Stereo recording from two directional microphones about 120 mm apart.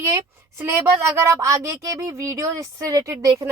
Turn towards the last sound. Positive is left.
turn(degrees=-25)  # may be behind; listen again after turning